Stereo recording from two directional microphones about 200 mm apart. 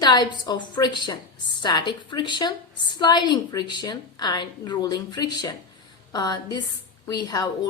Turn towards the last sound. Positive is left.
turn(degrees=20)  # may be behind; listen again after turning